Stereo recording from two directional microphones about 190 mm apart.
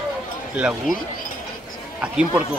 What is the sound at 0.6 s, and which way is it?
Speech, 5° right (ahead or behind).